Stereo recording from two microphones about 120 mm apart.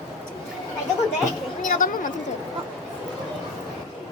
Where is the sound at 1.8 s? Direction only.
90° left.